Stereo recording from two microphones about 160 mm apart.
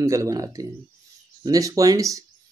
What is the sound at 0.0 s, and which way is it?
Speech, 20° right (ahead or behind).